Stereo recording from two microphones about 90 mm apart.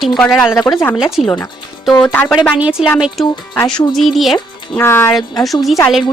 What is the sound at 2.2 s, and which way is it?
Speech, 5° left (ahead or behind).